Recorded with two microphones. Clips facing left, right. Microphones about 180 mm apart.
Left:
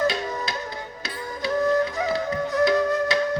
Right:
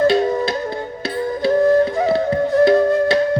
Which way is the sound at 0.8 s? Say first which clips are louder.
Right 11 dB; 55° right (ahead or behind).